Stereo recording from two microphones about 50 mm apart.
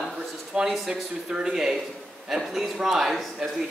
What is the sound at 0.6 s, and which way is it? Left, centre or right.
A man's voice, centre.